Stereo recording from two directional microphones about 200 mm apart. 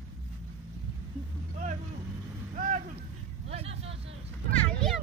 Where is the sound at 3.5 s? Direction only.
30° right (ahead or behind).